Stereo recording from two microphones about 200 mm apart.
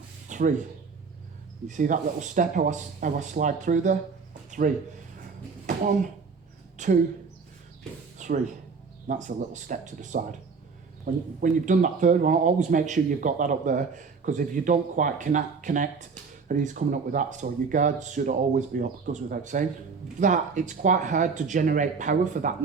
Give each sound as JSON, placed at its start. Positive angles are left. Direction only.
{"t": 0.3, "sound": "a sound", "side_deg": -40}
{"t": 1.6, "sound": "speech", "side_deg": -40}
{"t": 8.2, "sound": "music", "side_deg": -35}
{"t": 9.0, "sound": "speech", "side_deg": -40}